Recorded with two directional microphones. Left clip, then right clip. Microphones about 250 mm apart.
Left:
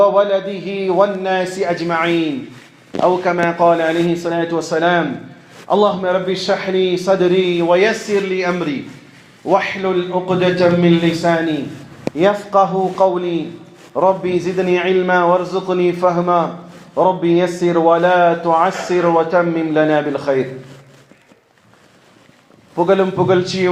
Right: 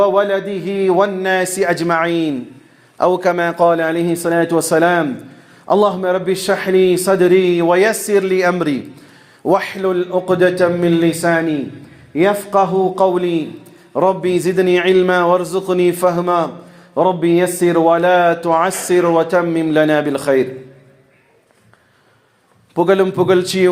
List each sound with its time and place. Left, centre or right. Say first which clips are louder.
0.0 s a man's voice: left 1 dB; right
22.7 s a man's voice: right 1 dB; right